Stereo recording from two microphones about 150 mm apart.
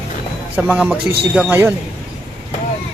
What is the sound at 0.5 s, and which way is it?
Speech, 10° right (ahead or behind).